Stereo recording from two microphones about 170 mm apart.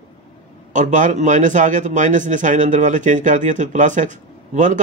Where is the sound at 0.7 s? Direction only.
45° right (ahead or behind).